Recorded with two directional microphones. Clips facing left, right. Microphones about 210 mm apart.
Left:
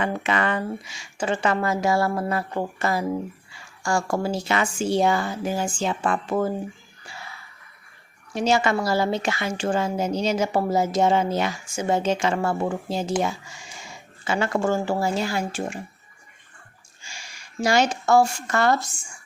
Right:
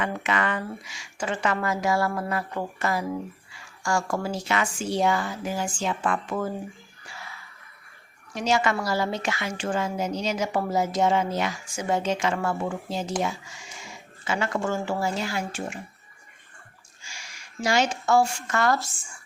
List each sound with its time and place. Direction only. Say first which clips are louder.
0.0 s a woman's voice: left 3 dB; 30° left (ahead or behind)
8.3 s a woman's voice: left 3 dB; 30° left (ahead or behind)
14.3 s speech: left 4 dB; 30° left (ahead or behind)
17.0 s a woman's voice: left 2 dB; 30° left (ahead or behind)
18.8 s speech: left 1 dB; centre (ahead or behind)